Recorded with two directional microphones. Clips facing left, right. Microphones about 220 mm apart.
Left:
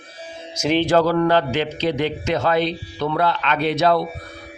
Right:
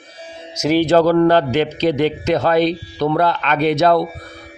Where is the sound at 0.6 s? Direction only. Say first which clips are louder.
Right 4 dB; 5° right (ahead or behind).